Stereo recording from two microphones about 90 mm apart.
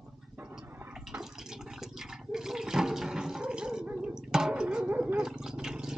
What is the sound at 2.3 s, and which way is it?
Toilet flush, 5° right (ahead or behind).